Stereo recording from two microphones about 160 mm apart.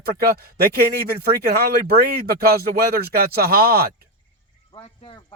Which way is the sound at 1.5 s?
75° right (ahead or behind).